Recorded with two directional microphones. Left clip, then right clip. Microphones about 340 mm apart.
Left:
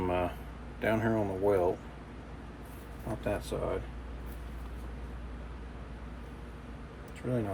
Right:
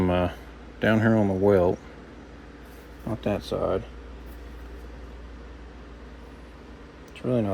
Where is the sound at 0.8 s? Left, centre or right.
Right.